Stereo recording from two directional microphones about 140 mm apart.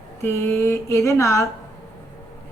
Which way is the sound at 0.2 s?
15° left (ahead or behind).